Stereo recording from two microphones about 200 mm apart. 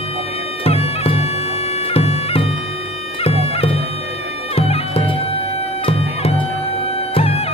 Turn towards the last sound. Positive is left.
turn(degrees=30)  # may be behind; listen again after turning